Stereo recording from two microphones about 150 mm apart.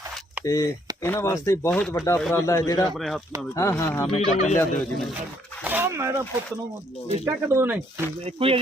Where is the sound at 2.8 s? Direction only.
Centre (ahead or behind).